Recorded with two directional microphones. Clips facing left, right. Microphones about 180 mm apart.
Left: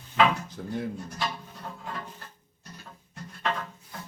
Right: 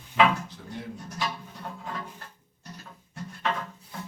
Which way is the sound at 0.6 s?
50° left (ahead or behind).